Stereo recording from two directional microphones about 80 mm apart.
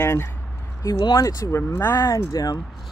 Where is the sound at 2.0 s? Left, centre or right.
Left.